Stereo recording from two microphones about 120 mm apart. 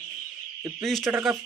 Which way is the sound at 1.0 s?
20° right (ahead or behind).